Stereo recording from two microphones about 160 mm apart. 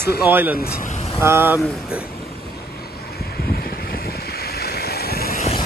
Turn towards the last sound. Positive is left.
turn(degrees=75)  # may be behind; listen again after turning